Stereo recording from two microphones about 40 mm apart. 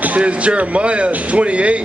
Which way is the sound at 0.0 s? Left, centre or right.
Right.